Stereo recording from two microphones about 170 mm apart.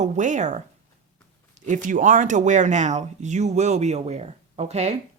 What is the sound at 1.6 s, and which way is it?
Speech, 50° right (ahead or behind).